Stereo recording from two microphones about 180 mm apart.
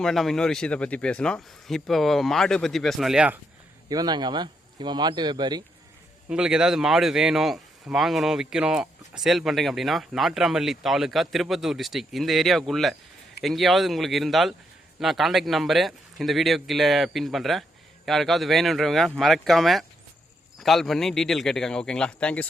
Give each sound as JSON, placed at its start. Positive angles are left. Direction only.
{"t": 0.0, "sound": "speech", "side_deg": 0}
{"t": 3.8, "sound": "speech", "side_deg": -20}
{"t": 6.2, "sound": "speech", "side_deg": -5}